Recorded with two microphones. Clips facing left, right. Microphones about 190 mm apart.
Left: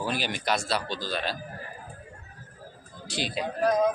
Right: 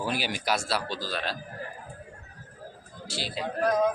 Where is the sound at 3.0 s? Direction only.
20° left (ahead or behind).